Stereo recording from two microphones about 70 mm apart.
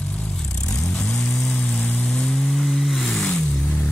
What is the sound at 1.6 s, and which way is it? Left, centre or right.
Vehicle, centre.